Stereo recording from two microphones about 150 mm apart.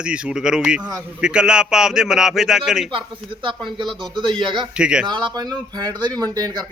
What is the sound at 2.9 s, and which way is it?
Speech, 35° right (ahead or behind).